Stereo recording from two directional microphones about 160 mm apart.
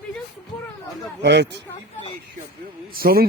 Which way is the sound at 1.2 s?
90° right.